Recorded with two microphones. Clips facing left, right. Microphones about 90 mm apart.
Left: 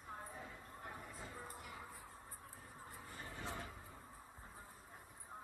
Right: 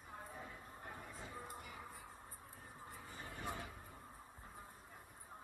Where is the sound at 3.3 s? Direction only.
15° right (ahead or behind).